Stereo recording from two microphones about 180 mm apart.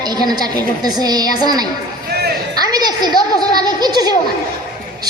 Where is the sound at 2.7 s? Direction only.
20° right (ahead or behind).